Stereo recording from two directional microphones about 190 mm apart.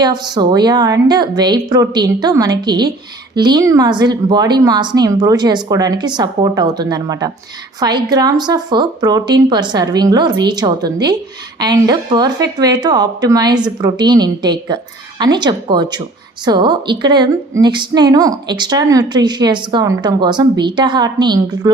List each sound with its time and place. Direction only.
0.0 s a woman's voice: 20° right (ahead or behind)